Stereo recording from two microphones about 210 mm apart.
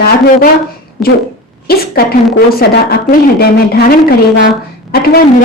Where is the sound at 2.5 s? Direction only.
45° left (ahead or behind).